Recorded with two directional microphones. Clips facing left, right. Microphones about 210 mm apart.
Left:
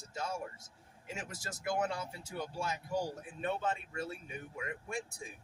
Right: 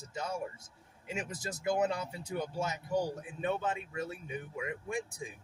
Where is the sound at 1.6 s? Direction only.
20° right (ahead or behind).